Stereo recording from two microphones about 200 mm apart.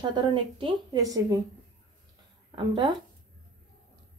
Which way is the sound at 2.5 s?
25° right (ahead or behind).